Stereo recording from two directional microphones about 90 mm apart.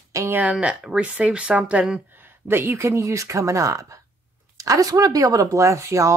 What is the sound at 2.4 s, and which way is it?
Speech, 25° right (ahead or behind).